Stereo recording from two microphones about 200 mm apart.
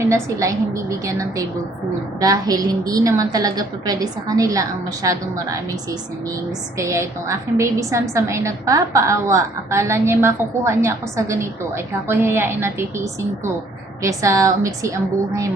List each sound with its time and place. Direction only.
0.0 s a woman's voice: 15° right (ahead or behind)
6.7 s a woman's voice: 15° right (ahead or behind)
14.0 s a woman's voice: 15° right (ahead or behind)